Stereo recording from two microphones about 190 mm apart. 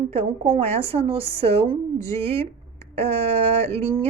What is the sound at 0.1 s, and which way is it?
A woman's voice, 30° right (ahead or behind).